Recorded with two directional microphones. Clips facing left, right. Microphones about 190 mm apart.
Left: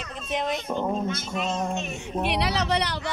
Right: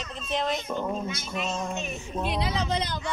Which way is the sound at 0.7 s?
30° left (ahead or behind).